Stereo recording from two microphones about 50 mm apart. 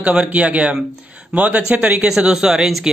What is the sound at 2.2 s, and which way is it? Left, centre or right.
Speech, centre.